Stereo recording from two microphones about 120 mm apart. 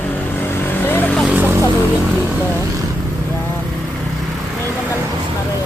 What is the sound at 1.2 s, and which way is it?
Speech, 10° right (ahead or behind).